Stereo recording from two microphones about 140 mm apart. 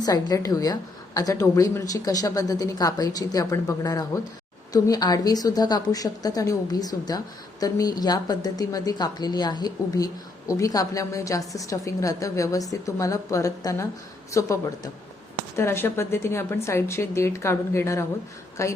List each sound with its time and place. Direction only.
0.0 s a woman's voice: 25° left (ahead or behind)